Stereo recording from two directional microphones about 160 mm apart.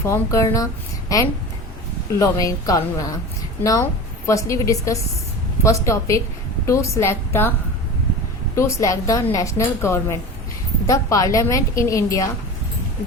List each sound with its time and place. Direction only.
0.0 s a woman's voice: 20° left (ahead or behind)
8.5 s a woman's voice: 20° left (ahead or behind)